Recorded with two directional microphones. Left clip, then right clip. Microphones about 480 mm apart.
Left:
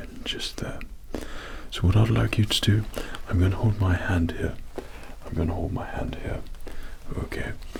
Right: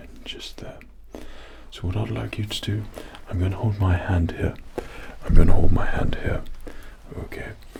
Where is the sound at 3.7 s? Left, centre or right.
Centre; by 6.4 s right.